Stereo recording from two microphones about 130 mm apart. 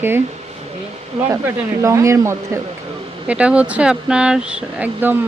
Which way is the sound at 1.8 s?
20° right (ahead or behind).